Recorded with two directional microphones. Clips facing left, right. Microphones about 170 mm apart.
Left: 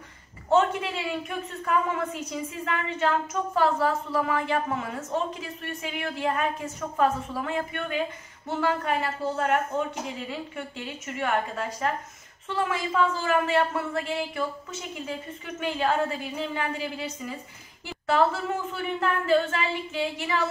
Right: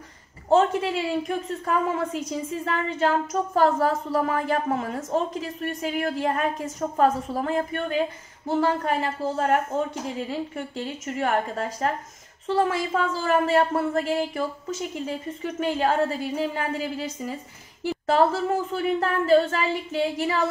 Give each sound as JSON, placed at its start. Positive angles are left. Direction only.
{"t": 0.5, "sound": "a woman's voice", "side_deg": -35}